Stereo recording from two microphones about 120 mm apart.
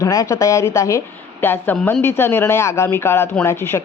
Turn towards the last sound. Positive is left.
turn(degrees=20)  # may be behind; listen again after turning